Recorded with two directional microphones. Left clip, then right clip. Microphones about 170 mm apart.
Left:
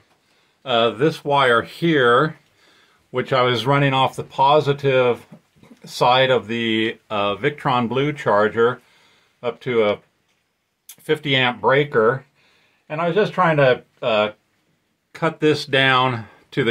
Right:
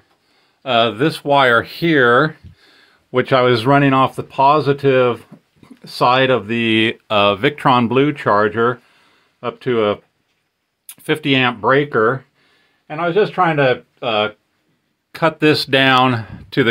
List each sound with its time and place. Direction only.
0.6 s speech: 55° right (ahead or behind)
10.9 s speech: 55° right (ahead or behind)
12.8 s speech: 35° right (ahead or behind)
15.1 s speech: 55° right (ahead or behind)